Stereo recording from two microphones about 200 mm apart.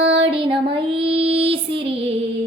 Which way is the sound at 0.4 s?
25° right (ahead or behind).